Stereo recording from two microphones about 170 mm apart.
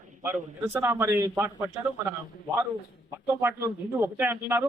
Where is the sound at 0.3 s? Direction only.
15° right (ahead or behind).